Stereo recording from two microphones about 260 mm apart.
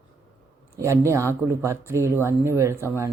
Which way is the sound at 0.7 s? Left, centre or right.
Centre.